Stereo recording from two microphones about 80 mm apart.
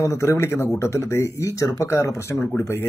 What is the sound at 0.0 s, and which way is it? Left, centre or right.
Speech, left.